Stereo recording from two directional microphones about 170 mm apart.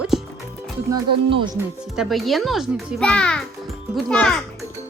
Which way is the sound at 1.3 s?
30° right (ahead or behind).